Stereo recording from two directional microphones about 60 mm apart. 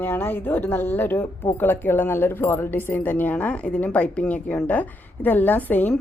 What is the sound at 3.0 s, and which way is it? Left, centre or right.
A woman's voice, left.